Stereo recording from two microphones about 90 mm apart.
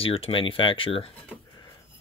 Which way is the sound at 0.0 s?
90° left.